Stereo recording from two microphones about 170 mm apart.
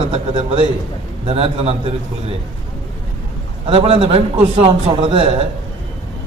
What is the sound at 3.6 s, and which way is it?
A man's voice, 35° right (ahead or behind).